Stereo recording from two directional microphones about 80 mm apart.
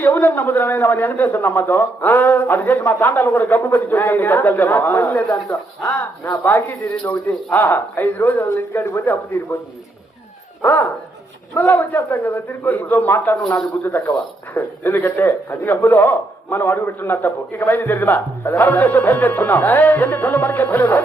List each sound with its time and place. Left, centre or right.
0.0 s a man's voice: left
5.3 s speech: left
6.4 s a man's voice: left
8.4 s speech: left
10.6 s a man's voice: left
14.5 s a man's voice: left